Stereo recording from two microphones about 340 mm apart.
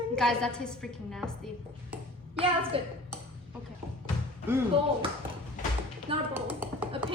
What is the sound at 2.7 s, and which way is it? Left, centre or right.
Speech, centre.